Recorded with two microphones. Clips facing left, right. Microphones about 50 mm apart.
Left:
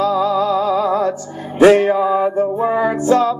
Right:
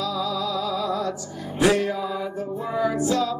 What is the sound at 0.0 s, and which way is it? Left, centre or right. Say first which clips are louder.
Music: left 10 dB; left.